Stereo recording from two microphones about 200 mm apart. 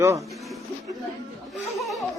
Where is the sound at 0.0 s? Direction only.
15° right (ahead or behind).